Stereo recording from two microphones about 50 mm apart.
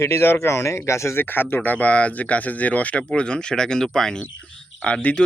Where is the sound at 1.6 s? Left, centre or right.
Left; by 4.2 s centre.